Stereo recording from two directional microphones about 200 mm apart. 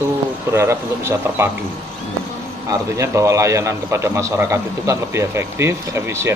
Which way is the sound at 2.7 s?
15° right (ahead or behind).